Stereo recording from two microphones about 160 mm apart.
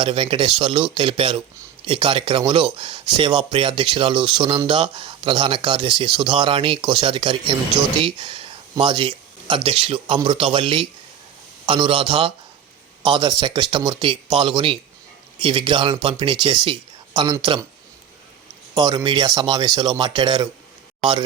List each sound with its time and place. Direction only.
0.0 s speech: 30° right (ahead or behind)
8.0 s a sound: 30° right (ahead or behind)
9.6 s speech: 35° right (ahead or behind)
18.7 s speech: 25° right (ahead or behind)